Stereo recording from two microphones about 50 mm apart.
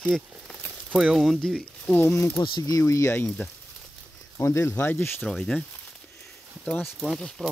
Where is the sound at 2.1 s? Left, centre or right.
Left.